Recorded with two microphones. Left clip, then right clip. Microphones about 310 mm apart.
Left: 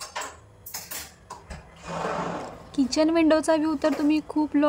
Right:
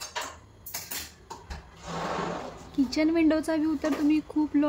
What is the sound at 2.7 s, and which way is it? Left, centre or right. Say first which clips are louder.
Speech: left 3 dB; centre.